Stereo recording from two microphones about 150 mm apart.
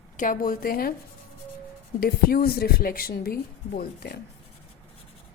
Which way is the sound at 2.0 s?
90° left.